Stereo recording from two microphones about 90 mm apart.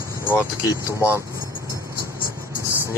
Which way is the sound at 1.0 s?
30° left (ahead or behind).